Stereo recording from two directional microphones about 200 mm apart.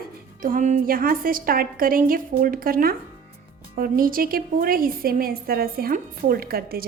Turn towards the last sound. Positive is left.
turn(degrees=-50)  # may be behind; listen again after turning